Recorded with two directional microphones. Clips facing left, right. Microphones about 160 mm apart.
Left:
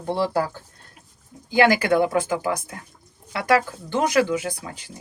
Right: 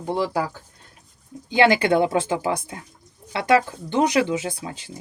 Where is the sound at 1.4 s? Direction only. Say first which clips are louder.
Even; 25° right (ahead or behind).